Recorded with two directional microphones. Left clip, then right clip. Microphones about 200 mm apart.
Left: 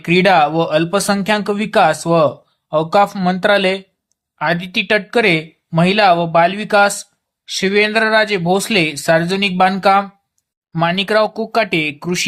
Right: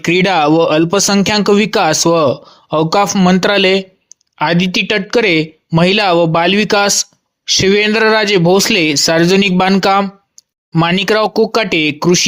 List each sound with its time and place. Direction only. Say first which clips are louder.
0.0 s speech: even; 40° right (ahead or behind)